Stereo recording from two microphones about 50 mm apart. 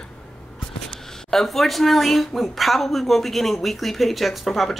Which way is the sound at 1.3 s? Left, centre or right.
Centre.